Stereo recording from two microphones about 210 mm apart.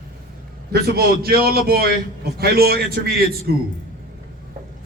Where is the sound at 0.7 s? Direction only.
45° right (ahead or behind).